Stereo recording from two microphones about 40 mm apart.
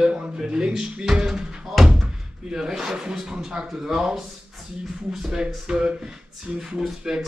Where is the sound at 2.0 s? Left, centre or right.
Centre.